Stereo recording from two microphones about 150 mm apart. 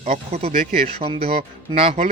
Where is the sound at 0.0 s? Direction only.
45° right (ahead or behind).